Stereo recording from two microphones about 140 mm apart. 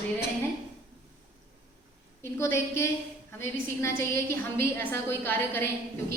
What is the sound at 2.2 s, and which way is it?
Speech, 20° left (ahead or behind).